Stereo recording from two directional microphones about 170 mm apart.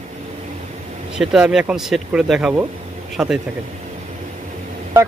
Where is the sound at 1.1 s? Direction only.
5° right (ahead or behind).